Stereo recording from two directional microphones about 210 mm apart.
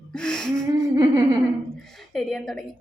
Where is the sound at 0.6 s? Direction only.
15° right (ahead or behind).